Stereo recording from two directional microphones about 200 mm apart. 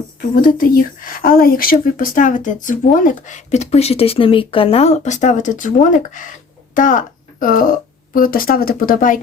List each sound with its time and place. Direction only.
0.2 s speech: 45° left (ahead or behind)